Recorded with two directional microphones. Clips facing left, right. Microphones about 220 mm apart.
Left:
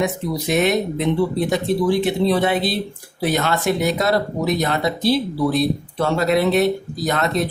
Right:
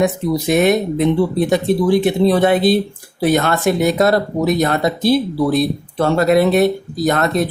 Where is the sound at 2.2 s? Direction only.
50° right (ahead or behind).